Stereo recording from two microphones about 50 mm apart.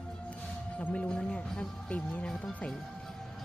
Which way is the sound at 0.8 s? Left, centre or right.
Left.